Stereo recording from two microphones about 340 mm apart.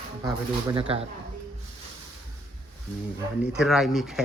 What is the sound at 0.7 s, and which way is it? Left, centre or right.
Speech, centre.